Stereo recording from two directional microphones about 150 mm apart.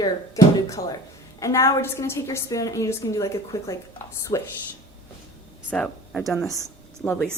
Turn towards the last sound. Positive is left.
turn(degrees=15)  # may be behind; listen again after turning